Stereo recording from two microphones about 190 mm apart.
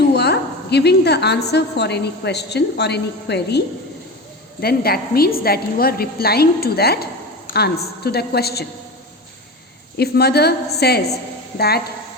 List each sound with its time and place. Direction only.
0.1 s a woman's voice: 60° left (ahead or behind)
4.6 s a woman's voice: 55° left (ahead or behind)
10.0 s a woman's voice: 60° left (ahead or behind)